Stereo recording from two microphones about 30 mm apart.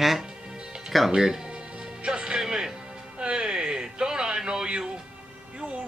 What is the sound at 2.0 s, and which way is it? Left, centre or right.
Speech, right.